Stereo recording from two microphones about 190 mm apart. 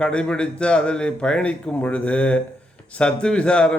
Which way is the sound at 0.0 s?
5° left (ahead or behind).